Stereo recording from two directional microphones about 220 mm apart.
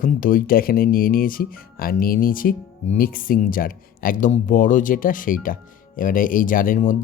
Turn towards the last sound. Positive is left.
turn(degrees=40)  # may be behind; listen again after turning